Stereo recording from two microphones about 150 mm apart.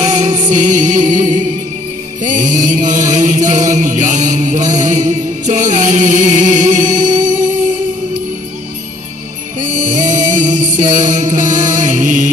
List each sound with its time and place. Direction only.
0.0 s music: 50° right (ahead or behind)
2.2 s chant: 55° right (ahead or behind)
9.8 s music: 55° right (ahead or behind)